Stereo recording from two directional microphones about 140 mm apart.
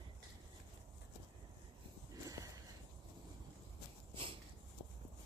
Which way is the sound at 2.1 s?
25° right (ahead or behind).